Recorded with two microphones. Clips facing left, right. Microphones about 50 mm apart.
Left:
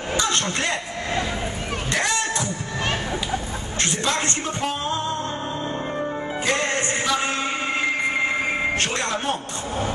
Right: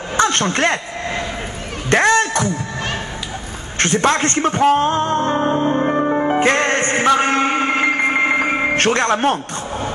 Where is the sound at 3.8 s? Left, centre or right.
Right.